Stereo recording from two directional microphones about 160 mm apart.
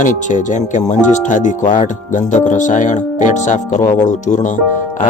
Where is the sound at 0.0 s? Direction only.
50° left (ahead or behind).